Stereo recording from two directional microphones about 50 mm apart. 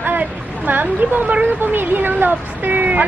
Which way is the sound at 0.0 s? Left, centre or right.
Right.